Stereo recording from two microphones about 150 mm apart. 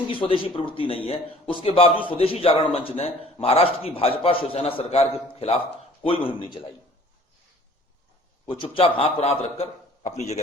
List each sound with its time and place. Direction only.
0.1 s a man's voice: 35° left (ahead or behind)
8.4 s a man's voice: 35° left (ahead or behind)